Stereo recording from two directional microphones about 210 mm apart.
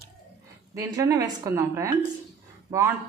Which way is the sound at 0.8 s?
15° right (ahead or behind).